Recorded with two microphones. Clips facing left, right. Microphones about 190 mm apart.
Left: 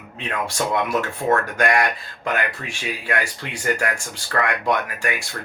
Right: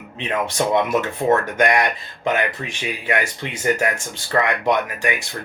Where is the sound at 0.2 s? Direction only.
20° right (ahead or behind).